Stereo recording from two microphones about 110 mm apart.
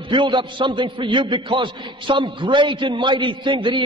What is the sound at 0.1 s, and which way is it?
A man's voice, 45° right (ahead or behind).